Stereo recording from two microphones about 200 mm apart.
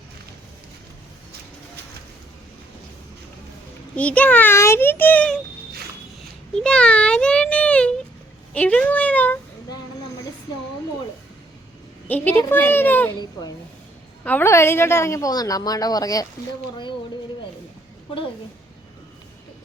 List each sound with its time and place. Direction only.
3.9 s a woman's voice: 5° left (ahead or behind)
6.5 s a sound: 5° left (ahead or behind)
8.5 s a woman's voice: 5° left (ahead or behind)
12.0 s a woman's voice: 10° left (ahead or behind)
14.3 s a woman's voice: 10° left (ahead or behind)